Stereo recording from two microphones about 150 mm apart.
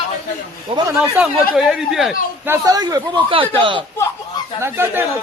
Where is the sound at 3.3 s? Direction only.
35° right (ahead or behind).